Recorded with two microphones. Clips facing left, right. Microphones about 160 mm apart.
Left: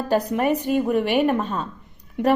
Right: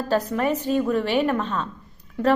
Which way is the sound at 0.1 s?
15° left (ahead or behind).